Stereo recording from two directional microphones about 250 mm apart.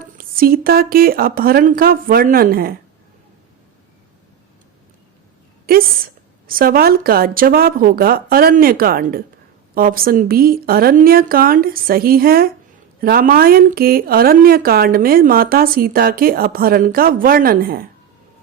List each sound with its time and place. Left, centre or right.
0.0 s speech: right
5.7 s a sound: right
6.5 s speech: right